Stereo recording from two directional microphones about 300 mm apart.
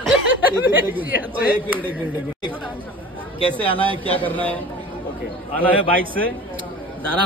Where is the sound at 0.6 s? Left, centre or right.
Centre.